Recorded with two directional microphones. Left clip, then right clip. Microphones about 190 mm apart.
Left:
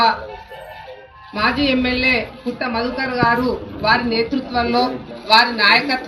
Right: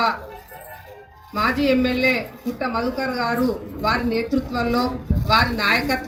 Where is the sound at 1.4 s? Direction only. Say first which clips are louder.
Left 2 dB; 60° right (ahead or behind).